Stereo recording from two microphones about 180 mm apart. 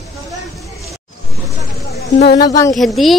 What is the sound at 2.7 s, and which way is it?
Speech, centre (ahead or behind).